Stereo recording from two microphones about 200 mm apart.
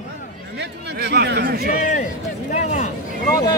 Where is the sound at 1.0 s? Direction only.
55° right (ahead or behind).